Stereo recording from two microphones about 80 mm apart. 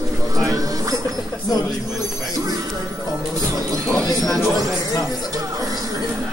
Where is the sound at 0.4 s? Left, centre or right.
Right.